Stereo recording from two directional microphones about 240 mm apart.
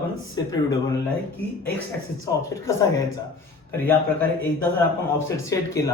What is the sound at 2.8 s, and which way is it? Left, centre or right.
Speech, centre.